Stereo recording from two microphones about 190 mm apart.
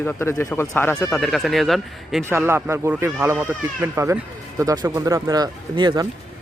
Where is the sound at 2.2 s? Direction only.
15° right (ahead or behind).